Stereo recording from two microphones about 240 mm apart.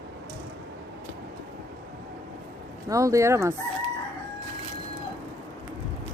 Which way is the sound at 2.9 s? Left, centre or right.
Centre.